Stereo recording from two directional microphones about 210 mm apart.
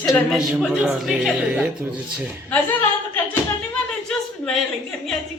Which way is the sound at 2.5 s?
10° left (ahead or behind).